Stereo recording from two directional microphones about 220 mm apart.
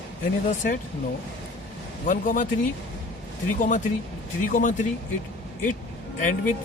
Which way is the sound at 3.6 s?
35° left (ahead or behind).